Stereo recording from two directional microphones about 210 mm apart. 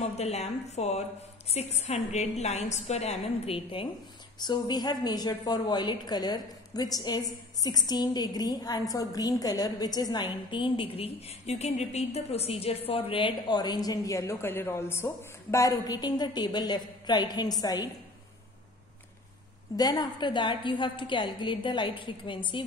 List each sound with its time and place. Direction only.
0.0 s a woman's voice: 30° left (ahead or behind)
19.8 s a woman's voice: 20° left (ahead or behind)